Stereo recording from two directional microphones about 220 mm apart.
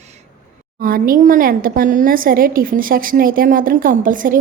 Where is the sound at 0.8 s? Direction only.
40° right (ahead or behind).